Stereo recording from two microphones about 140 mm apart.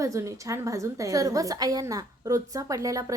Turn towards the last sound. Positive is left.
turn(degrees=-25)  # may be behind; listen again after turning